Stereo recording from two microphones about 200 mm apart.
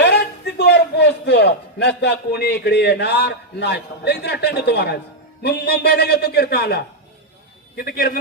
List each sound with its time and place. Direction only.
0.0 s a man's voice: 55° left (ahead or behind)